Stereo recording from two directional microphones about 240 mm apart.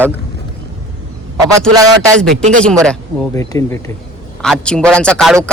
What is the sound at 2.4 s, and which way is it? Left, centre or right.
Speech, right.